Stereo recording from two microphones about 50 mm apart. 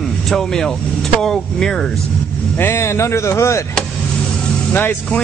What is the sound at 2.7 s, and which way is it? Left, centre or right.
Speech, left.